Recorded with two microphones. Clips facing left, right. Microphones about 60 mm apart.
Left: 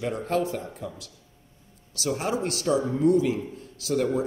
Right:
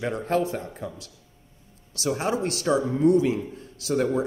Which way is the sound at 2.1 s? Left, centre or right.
Right.